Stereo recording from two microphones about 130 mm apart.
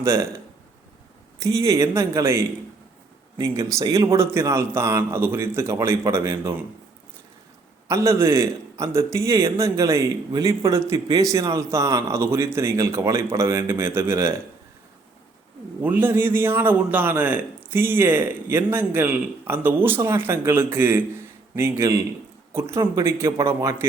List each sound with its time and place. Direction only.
0.0 s a man's voice: 20° right (ahead or behind)
7.9 s a man's voice: 25° right (ahead or behind)
15.8 s a man's voice: 15° right (ahead or behind)